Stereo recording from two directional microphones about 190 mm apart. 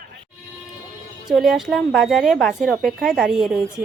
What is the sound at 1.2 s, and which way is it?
A woman's voice, centre (ahead or behind).